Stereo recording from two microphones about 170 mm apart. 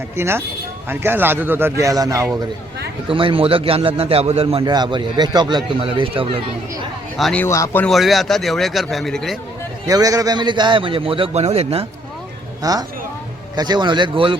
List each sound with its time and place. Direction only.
0.2 s a man's voice: 15° right (ahead or behind)
3.1 s a man's voice: 30° right (ahead or behind)
7.2 s a man's voice: centre (ahead or behind)
7.4 s speech: 15° left (ahead or behind)
7.9 s a man's voice: centre (ahead or behind)
9.8 s a man's voice: 20° right (ahead or behind); by 11.9 s 35° right (ahead or behind)
12.6 s speech: 20° right (ahead or behind)